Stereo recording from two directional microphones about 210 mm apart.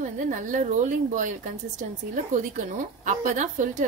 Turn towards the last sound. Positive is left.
turn(degrees=-35)  # may be behind; listen again after turning